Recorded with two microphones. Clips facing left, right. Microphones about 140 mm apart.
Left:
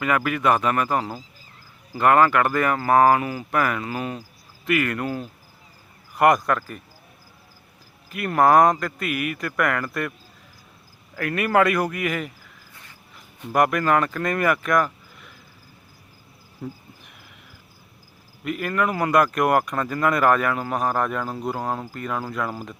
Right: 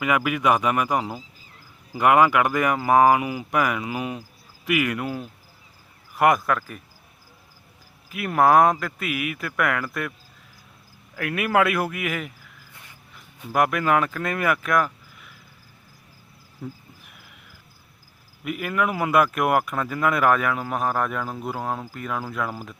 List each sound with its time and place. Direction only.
0.0 s speech: 10° right (ahead or behind)
8.1 s speech: 5° right (ahead or behind)
11.1 s speech: 5° right (ahead or behind)
16.6 s speech: centre (ahead or behind)
18.4 s speech: 5° right (ahead or behind)